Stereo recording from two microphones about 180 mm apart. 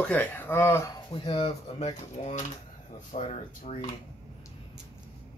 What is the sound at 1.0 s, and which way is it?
Speech, 30° left (ahead or behind).